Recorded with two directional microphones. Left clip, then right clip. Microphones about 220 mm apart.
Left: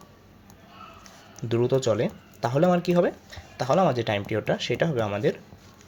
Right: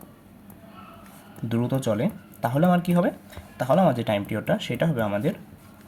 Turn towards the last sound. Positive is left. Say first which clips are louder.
# left 1 dB
turn(degrees=30)  # may be behind; listen again after turning